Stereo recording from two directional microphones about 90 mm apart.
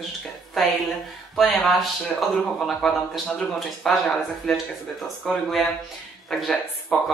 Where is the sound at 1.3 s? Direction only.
Centre (ahead or behind).